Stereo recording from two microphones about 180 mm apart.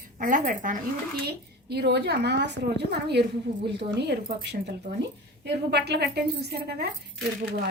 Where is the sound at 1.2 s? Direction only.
65° right (ahead or behind).